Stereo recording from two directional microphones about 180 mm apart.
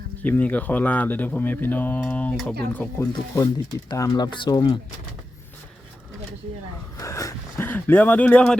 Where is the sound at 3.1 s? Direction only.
20° left (ahead or behind).